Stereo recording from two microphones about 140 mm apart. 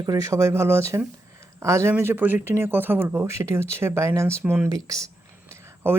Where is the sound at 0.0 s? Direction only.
25° right (ahead or behind).